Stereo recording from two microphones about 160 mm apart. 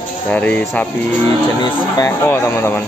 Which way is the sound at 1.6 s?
20° left (ahead or behind).